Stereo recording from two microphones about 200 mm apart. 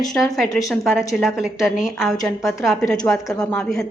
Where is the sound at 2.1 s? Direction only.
15° left (ahead or behind).